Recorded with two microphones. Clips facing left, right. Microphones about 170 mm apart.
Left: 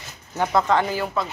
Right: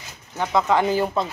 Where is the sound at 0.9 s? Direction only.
20° right (ahead or behind).